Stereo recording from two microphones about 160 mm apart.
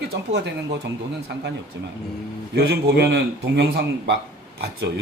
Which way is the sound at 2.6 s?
85° right.